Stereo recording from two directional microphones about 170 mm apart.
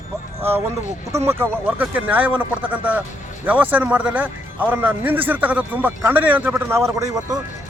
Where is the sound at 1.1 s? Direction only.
15° right (ahead or behind).